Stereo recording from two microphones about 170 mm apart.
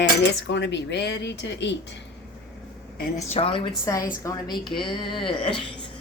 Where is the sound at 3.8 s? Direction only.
20° left (ahead or behind).